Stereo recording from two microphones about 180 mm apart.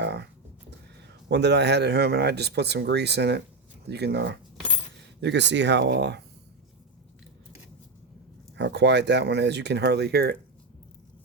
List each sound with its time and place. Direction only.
0.0 s a sound: 70° right (ahead or behind)
1.3 s speech: 70° right (ahead or behind)
8.5 s speech: 70° right (ahead or behind)